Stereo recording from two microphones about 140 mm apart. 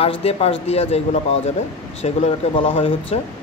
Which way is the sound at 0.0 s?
45° left (ahead or behind).